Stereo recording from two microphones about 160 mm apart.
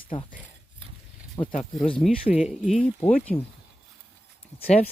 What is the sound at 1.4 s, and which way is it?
Speech, 35° left (ahead or behind).